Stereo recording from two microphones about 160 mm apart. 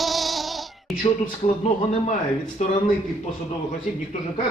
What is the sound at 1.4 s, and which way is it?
Speech, 40° left (ahead or behind).